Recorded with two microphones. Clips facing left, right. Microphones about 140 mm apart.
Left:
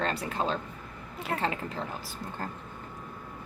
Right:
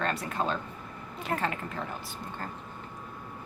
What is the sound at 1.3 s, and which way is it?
Speech, centre (ahead or behind).